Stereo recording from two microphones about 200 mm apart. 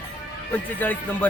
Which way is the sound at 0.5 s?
10° left (ahead or behind).